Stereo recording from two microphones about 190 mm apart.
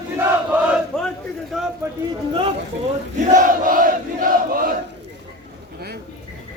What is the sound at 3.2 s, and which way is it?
Battle cry, 45° right (ahead or behind).